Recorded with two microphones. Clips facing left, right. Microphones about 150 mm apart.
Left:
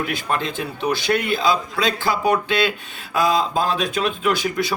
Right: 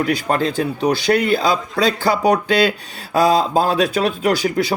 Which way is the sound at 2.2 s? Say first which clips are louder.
Right 4 dB; 35° right (ahead or behind).